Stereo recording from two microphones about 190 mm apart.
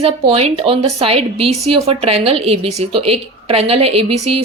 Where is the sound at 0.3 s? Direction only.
30° right (ahead or behind).